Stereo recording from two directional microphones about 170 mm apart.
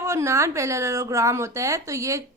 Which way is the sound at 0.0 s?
15° right (ahead or behind).